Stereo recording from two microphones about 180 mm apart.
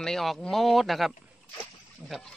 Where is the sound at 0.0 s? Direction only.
Centre (ahead or behind).